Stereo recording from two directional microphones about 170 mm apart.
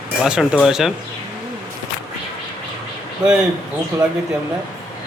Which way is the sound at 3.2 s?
25° right (ahead or behind).